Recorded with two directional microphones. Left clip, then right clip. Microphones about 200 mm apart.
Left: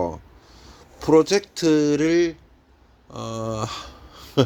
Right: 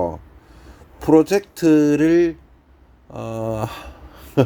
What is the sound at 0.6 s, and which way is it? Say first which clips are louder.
A man's voice: right 3 dB; 10° right (ahead or behind).